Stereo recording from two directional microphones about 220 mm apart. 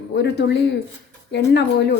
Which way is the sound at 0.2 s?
50° left (ahead or behind).